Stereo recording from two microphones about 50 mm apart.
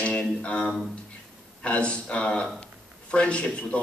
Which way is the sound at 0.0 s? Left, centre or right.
Left.